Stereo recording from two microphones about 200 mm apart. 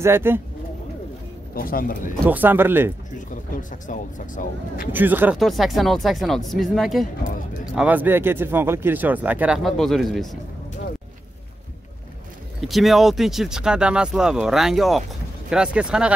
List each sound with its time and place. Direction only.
0.0 s speech: 10° right (ahead or behind)
1.5 s speech: 45° left (ahead or behind)
2.2 s speech: 10° right (ahead or behind)
3.8 s speech: 40° left (ahead or behind)
4.9 s speech: 10° right (ahead or behind)
12.6 s speech: centre (ahead or behind)